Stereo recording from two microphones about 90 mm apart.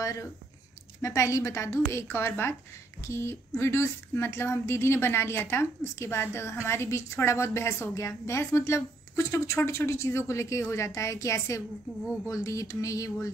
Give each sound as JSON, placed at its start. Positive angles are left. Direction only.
{"t": 0.0, "sound": "a woman's voice", "side_deg": 40}